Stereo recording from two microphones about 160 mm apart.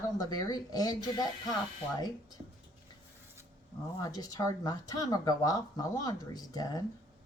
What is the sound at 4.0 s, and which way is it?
Speech, 20° left (ahead or behind).